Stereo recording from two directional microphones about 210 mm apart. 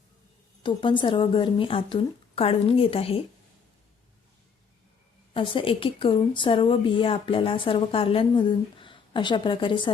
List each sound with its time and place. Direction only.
0.6 s a woman's voice: 20° left (ahead or behind)
5.3 s a woman's voice: 25° left (ahead or behind)